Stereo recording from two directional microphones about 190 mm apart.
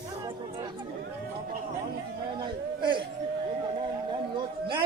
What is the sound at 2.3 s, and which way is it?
Speech, 25° right (ahead or behind).